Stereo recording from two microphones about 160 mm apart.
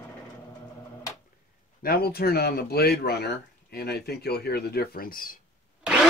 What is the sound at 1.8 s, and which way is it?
Speech, 75° left (ahead or behind).